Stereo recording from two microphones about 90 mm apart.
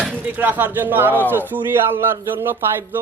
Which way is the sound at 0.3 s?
20° right (ahead or behind).